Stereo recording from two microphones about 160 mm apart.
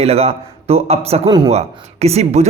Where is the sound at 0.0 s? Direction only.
40° right (ahead or behind).